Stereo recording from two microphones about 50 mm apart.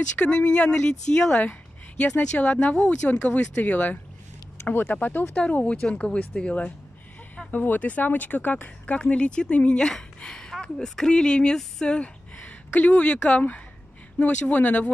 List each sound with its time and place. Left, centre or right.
0.4 s speech: left
1.4 s speech: left
5.3 s speech: left
7.5 s speech: left
9.8 s a woman's voice: centre
12.0 s speech: left